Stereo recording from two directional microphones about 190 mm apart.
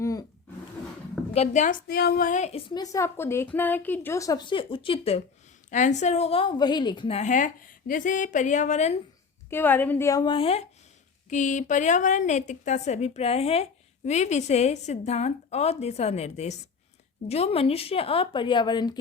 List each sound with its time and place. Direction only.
0.0 s roar: 15° left (ahead or behind)
1.3 s a woman's voice: 35° left (ahead or behind)
9.5 s a woman's voice: 10° left (ahead or behind)